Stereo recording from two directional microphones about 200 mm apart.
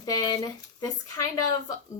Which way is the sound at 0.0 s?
20° left (ahead or behind).